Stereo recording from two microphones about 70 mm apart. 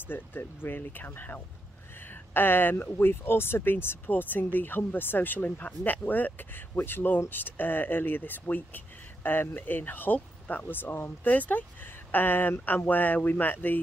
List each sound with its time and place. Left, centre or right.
0.0 s speech: left